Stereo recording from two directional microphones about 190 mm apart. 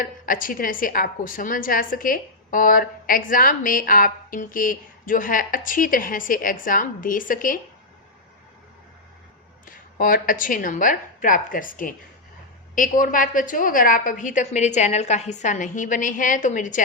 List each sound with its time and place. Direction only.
0.0 s a woman's voice: 45° left (ahead or behind)
9.6 s a woman's voice: 45° left (ahead or behind)